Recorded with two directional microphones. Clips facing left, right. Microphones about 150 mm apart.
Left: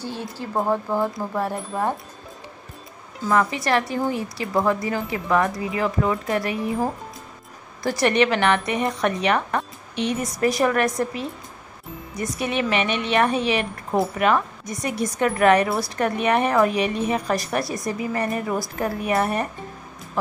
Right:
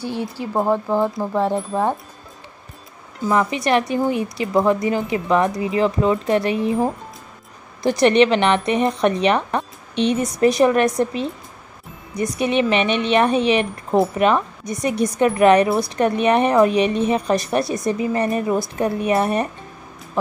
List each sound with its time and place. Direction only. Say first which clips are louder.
0.0 s speech: right 5 dB; 15° right (ahead or behind)
3.3 s speech: right 2 dB; 20° right (ahead or behind)